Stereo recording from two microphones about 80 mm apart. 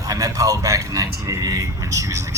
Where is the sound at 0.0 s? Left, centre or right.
Right.